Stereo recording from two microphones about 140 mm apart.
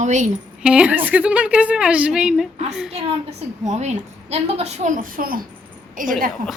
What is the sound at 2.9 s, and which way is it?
A woman's voice, 50° right (ahead or behind).